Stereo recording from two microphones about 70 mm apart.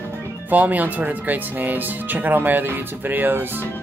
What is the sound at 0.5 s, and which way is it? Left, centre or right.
Speech, right.